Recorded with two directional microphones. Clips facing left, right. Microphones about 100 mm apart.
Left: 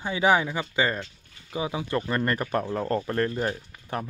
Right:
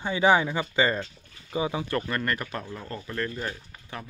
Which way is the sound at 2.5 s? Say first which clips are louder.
Left 9 dB; 45° left (ahead or behind).